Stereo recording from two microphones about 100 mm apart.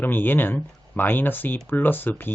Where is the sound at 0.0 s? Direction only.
20° left (ahead or behind).